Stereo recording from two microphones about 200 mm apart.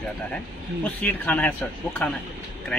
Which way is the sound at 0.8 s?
10° left (ahead or behind).